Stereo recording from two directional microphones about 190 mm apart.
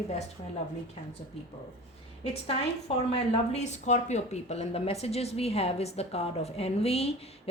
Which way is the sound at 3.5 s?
35° left (ahead or behind).